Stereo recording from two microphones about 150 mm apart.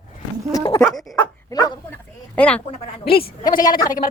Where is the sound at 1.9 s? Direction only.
10° left (ahead or behind).